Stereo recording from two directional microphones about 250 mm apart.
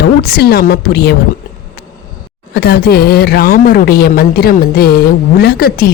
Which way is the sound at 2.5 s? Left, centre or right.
Left.